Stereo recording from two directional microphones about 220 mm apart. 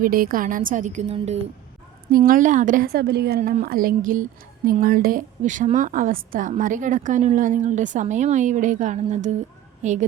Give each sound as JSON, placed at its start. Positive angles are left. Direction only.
{"t": 0.0, "sound": "a woman's voice", "side_deg": -40}
{"t": 2.1, "sound": "a woman's voice", "side_deg": -40}